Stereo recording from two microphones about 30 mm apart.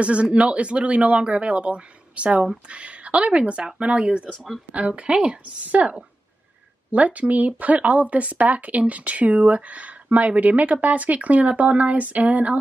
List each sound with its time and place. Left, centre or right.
0.0 s a woman's voice: right
4.7 s a woman's voice: right
5.1 s speech: right
5.6 s a woman's voice: right
6.9 s speech: right